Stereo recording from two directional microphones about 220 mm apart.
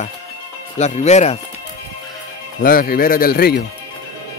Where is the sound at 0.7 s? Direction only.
30° left (ahead or behind).